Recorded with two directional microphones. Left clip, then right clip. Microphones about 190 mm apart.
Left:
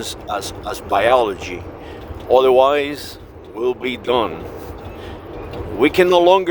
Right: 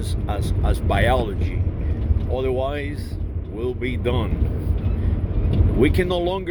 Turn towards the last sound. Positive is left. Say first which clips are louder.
# left 10 dB
turn(degrees=45)  # may be behind; listen again after turning